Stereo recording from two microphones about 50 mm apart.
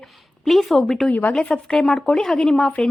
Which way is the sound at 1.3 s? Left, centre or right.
Centre.